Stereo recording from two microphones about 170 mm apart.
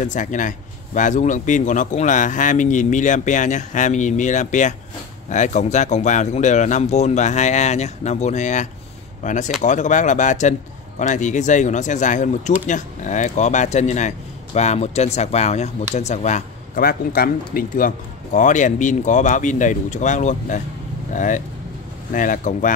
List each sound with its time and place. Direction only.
0.0 s speech: 45° left (ahead or behind)
16.8 s speech: 60° left (ahead or behind)